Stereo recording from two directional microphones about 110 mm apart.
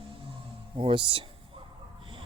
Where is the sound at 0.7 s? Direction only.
50° right (ahead or behind).